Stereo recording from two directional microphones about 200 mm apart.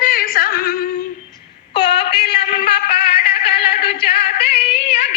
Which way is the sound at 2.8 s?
30° left (ahead or behind).